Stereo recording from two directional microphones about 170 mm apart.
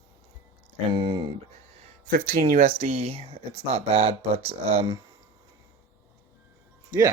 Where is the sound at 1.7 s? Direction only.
45° right (ahead or behind).